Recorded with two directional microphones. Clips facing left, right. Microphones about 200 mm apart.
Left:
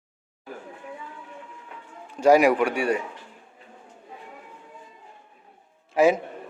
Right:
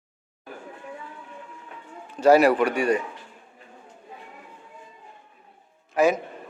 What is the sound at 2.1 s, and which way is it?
Speech, 15° left (ahead or behind).